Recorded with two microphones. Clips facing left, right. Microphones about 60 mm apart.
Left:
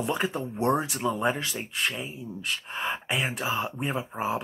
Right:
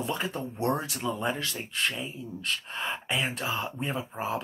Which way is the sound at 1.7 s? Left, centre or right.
Centre.